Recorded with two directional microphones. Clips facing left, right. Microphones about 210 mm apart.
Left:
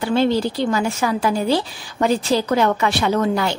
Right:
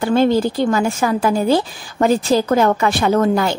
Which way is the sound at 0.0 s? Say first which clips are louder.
Right 3 dB; 50° right (ahead or behind).